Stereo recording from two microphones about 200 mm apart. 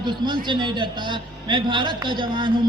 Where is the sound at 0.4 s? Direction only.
25° right (ahead or behind).